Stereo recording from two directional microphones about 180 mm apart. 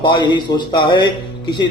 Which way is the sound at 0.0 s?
25° left (ahead or behind).